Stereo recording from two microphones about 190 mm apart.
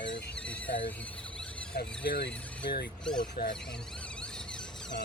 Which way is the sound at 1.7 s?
60° left (ahead or behind).